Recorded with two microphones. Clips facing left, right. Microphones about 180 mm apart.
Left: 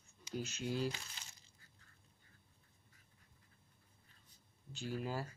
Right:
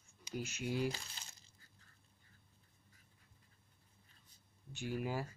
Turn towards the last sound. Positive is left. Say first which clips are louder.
# right 2 dB
turn(degrees=-15)  # may be behind; listen again after turning